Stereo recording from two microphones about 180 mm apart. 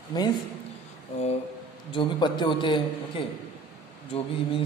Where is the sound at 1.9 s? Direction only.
25° left (ahead or behind).